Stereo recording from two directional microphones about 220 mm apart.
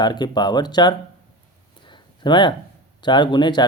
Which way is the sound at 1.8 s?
20° left (ahead or behind).